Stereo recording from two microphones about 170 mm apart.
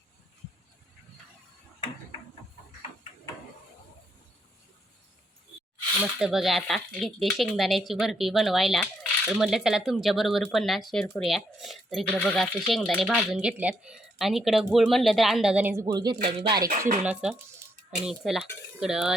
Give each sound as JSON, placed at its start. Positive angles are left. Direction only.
{"t": 6.0, "sound": "speech", "side_deg": -5}
{"t": 17.0, "sound": "speech", "side_deg": -5}